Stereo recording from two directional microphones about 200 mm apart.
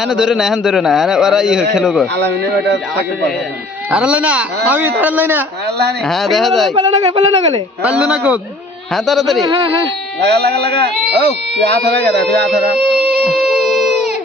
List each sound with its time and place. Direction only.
0.0 s a man's voice: centre (ahead or behind)
2.1 s speech: 60° right (ahead or behind)
3.9 s speech: 5° right (ahead or behind)
6.1 s a man's voice: centre (ahead or behind)
7.0 s speech: 30° right (ahead or behind)
7.9 s a man's voice: 5° right (ahead or behind)
10.2 s speech: 55° right (ahead or behind)
13.2 s music: centre (ahead or behind)